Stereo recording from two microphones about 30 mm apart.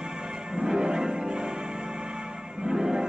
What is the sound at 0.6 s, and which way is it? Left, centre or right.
Music, right.